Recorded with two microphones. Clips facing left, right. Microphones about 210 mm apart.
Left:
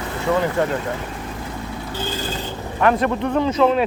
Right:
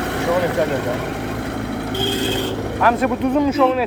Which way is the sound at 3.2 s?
15° right (ahead or behind).